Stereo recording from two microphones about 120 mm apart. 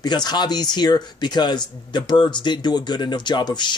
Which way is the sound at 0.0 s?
35° left (ahead or behind).